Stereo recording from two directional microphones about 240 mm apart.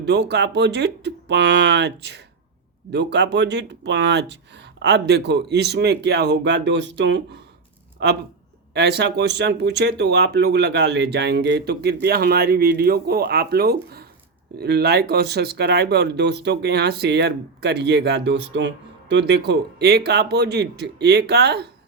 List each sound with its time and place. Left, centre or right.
0.0 s speech: right